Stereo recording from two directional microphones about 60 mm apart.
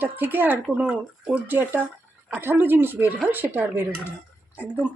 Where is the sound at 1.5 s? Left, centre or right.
Right.